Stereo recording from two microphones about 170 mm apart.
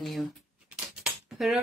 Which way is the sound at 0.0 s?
Centre (ahead or behind).